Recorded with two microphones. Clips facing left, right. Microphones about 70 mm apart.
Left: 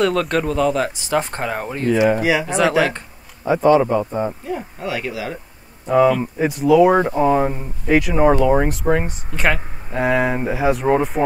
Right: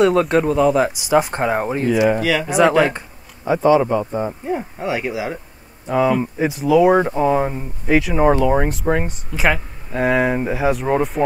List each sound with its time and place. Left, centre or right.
0.0 s speech: centre
2.4 s speech: centre
4.5 s speech: right
5.9 s speech: centre